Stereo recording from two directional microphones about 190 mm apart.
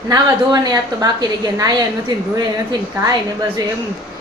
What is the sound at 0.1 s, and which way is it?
Speech, 20° right (ahead or behind).